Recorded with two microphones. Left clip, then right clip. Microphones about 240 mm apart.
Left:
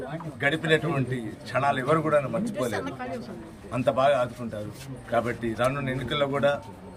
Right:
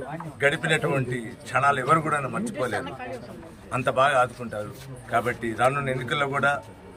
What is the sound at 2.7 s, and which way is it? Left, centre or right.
Speech, right.